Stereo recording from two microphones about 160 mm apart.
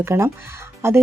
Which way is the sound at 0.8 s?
15° right (ahead or behind).